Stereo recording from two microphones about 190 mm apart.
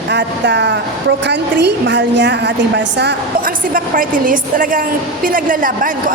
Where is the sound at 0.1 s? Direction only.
65° right (ahead or behind).